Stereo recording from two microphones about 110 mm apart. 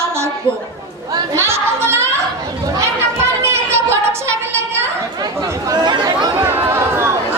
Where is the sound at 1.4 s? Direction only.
25° right (ahead or behind).